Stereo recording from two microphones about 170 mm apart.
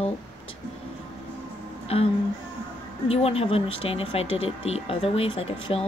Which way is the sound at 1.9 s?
35° left (ahead or behind).